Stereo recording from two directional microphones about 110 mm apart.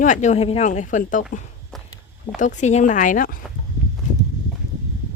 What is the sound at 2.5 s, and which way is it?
Speech, 90° left.